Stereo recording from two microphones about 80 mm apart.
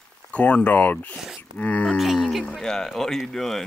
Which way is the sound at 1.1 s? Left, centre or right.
Centre.